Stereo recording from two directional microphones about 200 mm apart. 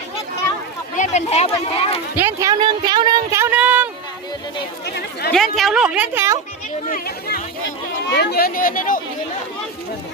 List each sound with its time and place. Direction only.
0.9 s speech: 35° left (ahead or behind)
2.1 s a sound: 15° right (ahead or behind)
5.3 s a woman's voice: centre (ahead or behind)
6.8 s speech: 45° left (ahead or behind)